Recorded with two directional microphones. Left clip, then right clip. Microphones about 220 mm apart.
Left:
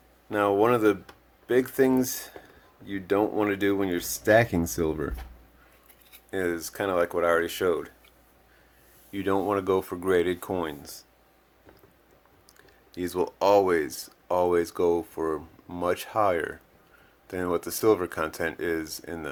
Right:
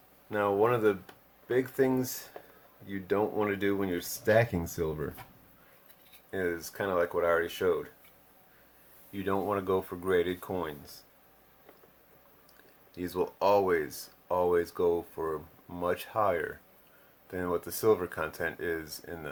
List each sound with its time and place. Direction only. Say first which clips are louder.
0.3 s speech: left 5 dB; 45° left (ahead or behind)
6.3 s speech: left 4 dB; 45° left (ahead or behind)
9.1 s speech: left 5 dB; 40° left (ahead or behind)
12.9 s speech: left 4 dB; 40° left (ahead or behind)